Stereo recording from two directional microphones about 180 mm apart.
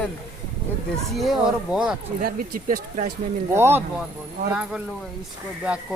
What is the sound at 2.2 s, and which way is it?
Speech, 50° right (ahead or behind).